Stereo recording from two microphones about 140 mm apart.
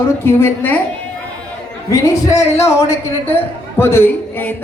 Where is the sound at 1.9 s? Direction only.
20° left (ahead or behind).